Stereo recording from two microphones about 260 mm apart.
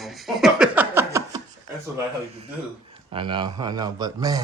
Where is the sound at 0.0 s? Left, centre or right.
Centre.